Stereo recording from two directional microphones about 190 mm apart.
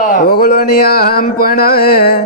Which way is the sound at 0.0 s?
50° left (ahead or behind).